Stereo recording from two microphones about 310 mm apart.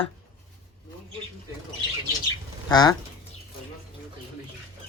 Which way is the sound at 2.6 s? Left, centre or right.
Centre.